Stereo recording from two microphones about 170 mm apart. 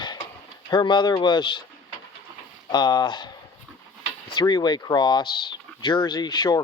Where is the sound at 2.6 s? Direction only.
25° left (ahead or behind).